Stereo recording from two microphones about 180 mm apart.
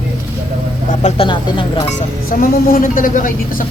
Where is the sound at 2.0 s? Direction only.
50° left (ahead or behind).